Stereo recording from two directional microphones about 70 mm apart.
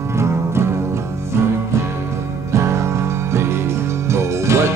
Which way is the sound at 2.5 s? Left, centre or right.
Right.